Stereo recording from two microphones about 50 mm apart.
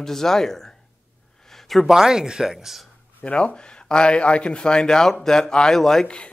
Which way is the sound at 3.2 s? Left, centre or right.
Left.